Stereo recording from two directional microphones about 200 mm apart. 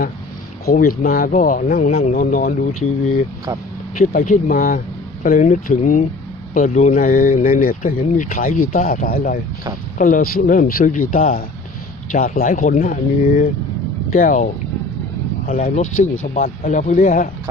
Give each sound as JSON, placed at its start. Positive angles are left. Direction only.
{"t": 0.6, "sound": "speech", "side_deg": 45}
{"t": 3.9, "sound": "speech", "side_deg": 45}